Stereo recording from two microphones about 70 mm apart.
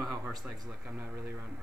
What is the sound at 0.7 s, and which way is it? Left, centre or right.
Speech, centre.